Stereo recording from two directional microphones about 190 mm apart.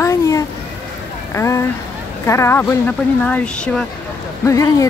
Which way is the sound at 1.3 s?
15° left (ahead or behind).